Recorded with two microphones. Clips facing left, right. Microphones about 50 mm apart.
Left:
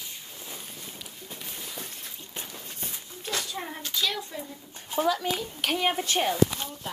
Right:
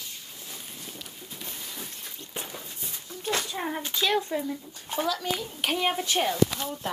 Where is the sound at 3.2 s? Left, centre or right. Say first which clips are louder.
Right 4 dB; right.